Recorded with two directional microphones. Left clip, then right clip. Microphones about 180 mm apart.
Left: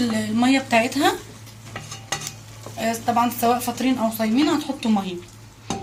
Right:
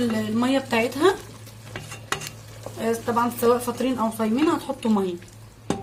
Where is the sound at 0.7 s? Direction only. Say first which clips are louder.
Left 4 dB; 45° right (ahead or behind).